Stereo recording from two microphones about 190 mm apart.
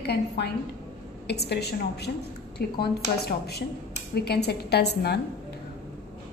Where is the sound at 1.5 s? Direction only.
60° left (ahead or behind).